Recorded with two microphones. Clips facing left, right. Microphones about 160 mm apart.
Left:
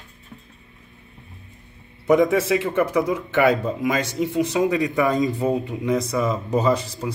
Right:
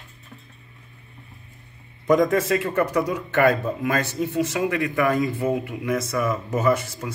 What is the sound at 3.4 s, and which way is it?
A man's voice, 10° left (ahead or behind).